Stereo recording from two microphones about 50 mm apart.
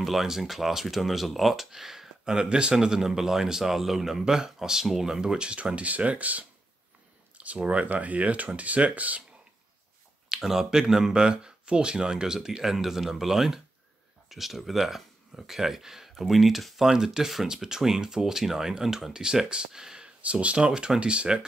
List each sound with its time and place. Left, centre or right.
0.0 s speech: centre; by 7.8 s right
7.8 s speech: right
10.4 s speech: centre
20.2 s speech: right